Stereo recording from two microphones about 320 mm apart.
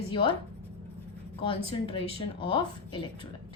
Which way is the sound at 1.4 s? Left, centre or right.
Centre.